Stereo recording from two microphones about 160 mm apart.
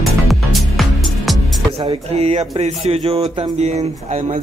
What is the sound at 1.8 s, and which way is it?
Speech, 35° right (ahead or behind).